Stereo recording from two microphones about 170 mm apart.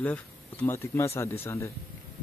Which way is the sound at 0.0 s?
10° left (ahead or behind).